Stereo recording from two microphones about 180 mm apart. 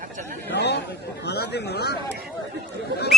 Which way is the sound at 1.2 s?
65° left (ahead or behind).